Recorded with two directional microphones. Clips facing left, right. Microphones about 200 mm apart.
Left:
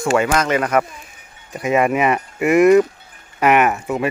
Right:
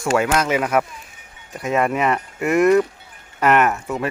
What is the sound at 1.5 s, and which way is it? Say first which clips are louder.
Speech: left 3 dB; 5° left (ahead or behind).